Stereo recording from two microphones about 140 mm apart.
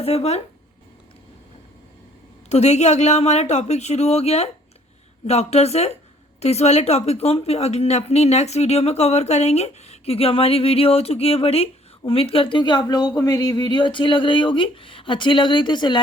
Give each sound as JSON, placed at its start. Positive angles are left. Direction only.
{"t": 0.0, "sound": "speech", "side_deg": 45}
{"t": 2.5, "sound": "speech", "side_deg": 50}